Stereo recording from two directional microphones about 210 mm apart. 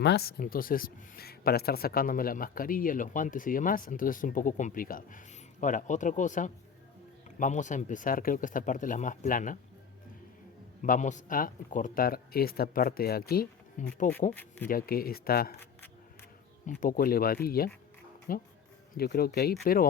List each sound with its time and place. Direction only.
0.0 s speech: 50° left (ahead or behind)
10.8 s speech: 35° left (ahead or behind)
16.8 s speech: 40° left (ahead or behind)